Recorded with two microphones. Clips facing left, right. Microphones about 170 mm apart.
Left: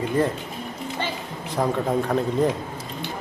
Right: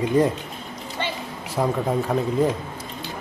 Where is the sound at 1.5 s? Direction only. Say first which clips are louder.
Even; 5° right (ahead or behind).